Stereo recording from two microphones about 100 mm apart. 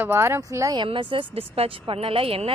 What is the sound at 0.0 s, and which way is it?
Speech, 25° right (ahead or behind).